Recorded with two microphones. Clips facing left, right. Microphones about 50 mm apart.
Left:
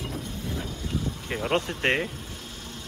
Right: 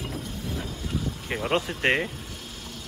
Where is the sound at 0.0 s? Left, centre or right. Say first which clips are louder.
Even; left.